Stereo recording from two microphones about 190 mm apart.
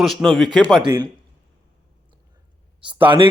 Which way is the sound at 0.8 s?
25° right (ahead or behind).